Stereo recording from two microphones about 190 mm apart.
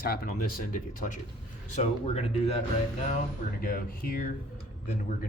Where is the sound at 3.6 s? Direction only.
50° left (ahead or behind).